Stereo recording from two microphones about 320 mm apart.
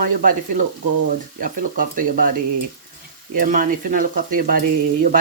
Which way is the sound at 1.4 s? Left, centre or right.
Right.